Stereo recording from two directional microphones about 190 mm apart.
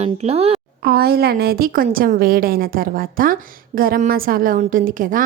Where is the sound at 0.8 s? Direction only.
55° right (ahead or behind).